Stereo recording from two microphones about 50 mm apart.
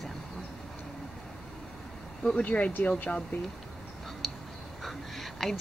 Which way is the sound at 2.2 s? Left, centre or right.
Left.